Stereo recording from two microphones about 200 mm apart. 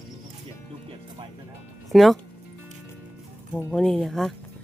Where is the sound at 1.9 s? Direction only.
Centre (ahead or behind).